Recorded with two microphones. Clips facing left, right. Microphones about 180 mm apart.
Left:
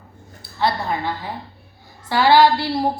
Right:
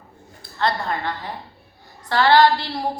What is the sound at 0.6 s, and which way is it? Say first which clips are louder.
A woman's voice: left 2 dB; 5° left (ahead or behind).